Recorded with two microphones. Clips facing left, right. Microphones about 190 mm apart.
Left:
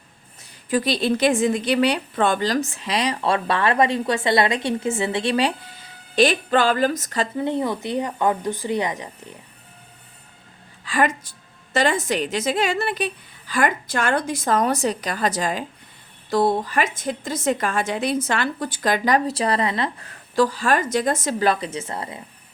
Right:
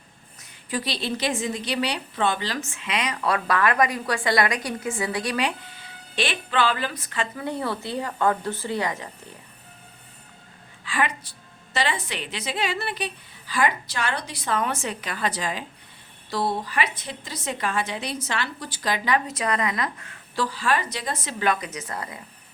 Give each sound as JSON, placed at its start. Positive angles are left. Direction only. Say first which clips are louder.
{"t": 0.7, "sound": "a woman's voice", "louder": "left 8 dB", "side_deg": 50}
{"t": 6.1, "sound": "a woman's voice", "louder": "left 7 dB", "side_deg": 40}
{"t": 7.3, "sound": "a woman's voice", "louder": "left 7 dB", "side_deg": 20}
{"t": 10.8, "sound": "a woman's voice", "louder": "left 5 dB", "side_deg": 45}